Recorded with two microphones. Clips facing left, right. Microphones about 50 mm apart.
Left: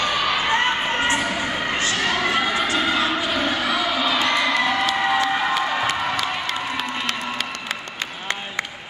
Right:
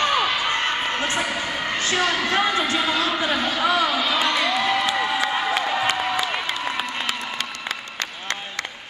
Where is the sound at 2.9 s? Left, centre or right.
Centre.